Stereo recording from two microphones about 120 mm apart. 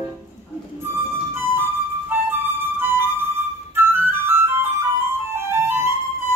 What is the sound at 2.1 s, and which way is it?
Music, 20° right (ahead or behind).